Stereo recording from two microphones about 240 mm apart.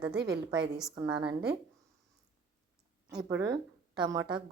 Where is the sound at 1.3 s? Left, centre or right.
Right.